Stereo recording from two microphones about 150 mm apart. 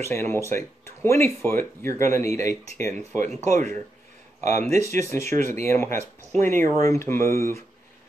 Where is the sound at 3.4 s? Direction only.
50° right (ahead or behind).